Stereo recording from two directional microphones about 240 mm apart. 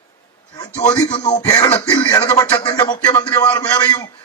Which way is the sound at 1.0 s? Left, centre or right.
Centre.